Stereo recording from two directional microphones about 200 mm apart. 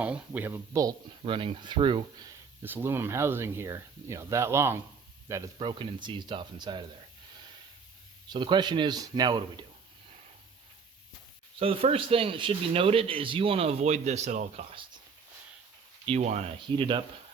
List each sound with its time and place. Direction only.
0.0 s a man's voice: 10° right (ahead or behind)
2.6 s a man's voice: 10° right (ahead or behind)
8.3 s a man's voice: 20° right (ahead or behind)
11.6 s a man's voice: 30° right (ahead or behind)
16.0 s a man's voice: 35° right (ahead or behind)